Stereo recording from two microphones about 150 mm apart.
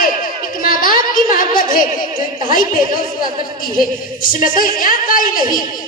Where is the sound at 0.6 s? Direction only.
70° left (ahead or behind).